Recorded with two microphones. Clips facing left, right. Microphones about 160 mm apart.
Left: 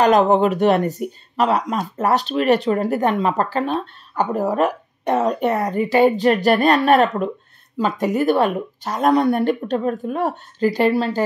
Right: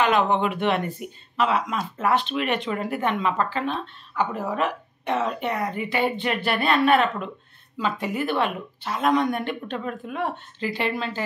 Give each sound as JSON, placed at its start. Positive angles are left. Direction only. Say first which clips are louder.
{"t": 0.0, "sound": "speech", "louder": "left 7 dB", "side_deg": 40}